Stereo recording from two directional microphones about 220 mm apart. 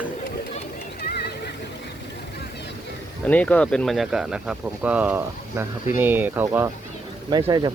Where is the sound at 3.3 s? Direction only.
5° left (ahead or behind).